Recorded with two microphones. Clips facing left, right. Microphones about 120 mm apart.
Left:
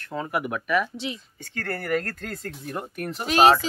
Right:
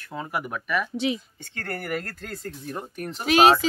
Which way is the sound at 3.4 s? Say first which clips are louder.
Even; 20° right (ahead or behind).